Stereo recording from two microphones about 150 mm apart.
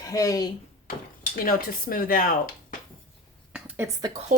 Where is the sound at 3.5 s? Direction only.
15° right (ahead or behind).